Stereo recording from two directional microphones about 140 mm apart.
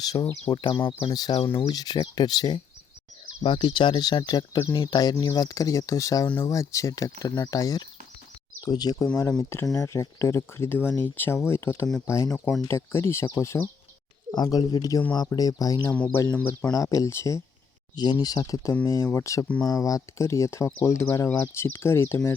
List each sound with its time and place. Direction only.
0.0 s speech: 30° left (ahead or behind)
6.2 s speech: 10° left (ahead or behind)
6.5 s speech: 20° left (ahead or behind)
9.4 s speech: 20° left (ahead or behind)
12.3 s speech: 5° left (ahead or behind)
12.6 s speech: 20° left (ahead or behind)
15.9 s speech: 10° left (ahead or behind)
16.7 s speech: 25° left (ahead or behind)
17.9 s speech: 30° left (ahead or behind)